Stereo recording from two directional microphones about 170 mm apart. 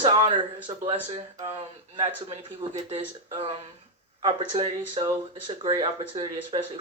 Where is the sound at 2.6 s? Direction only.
35° right (ahead or behind).